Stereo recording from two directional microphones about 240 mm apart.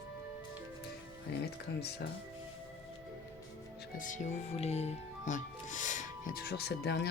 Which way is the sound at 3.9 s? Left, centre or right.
Left.